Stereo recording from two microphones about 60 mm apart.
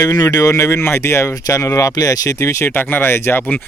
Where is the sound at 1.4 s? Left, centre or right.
Left.